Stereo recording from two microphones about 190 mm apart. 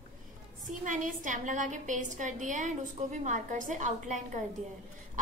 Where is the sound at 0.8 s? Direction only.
40° right (ahead or behind).